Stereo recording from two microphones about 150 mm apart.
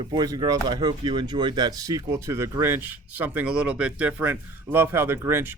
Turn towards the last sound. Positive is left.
turn(degrees=-15)  # may be behind; listen again after turning